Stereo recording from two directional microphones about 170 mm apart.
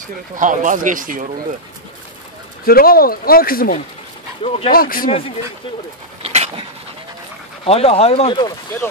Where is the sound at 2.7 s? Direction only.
60° left (ahead or behind).